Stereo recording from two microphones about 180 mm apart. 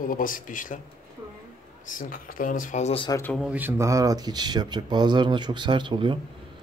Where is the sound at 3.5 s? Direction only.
10° right (ahead or behind); by 6.2 s 25° right (ahead or behind).